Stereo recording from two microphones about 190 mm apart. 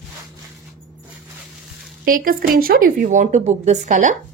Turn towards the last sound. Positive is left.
turn(degrees=-40)  # may be behind; listen again after turning